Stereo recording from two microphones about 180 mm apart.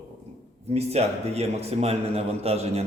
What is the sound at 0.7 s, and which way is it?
A man's voice, 35° right (ahead or behind).